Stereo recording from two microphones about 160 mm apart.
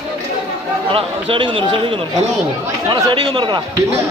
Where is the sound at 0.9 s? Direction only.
35° right (ahead or behind).